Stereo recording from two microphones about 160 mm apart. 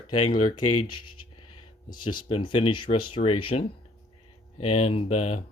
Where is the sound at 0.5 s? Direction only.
30° left (ahead or behind).